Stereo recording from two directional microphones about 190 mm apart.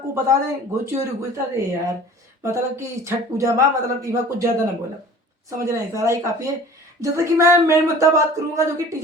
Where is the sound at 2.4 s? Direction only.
15° right (ahead or behind).